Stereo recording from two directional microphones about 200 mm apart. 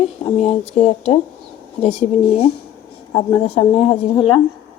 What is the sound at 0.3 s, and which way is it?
A woman's voice, 30° left (ahead or behind).